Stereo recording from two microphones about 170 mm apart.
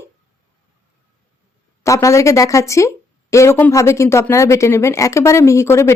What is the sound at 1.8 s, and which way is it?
Speech, 15° left (ahead or behind).